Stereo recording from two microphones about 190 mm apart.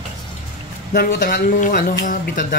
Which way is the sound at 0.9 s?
45° left (ahead or behind).